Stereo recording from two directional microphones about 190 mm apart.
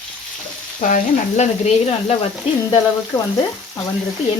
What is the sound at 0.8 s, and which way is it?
Frying, 40° left (ahead or behind).